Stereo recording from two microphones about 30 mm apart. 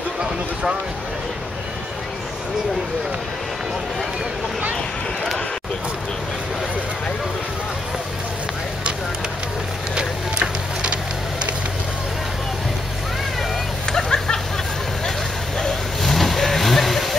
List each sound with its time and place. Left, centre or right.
10.4 s a sound: right
13.8 s vehicle: left
16.0 s vehicle: centre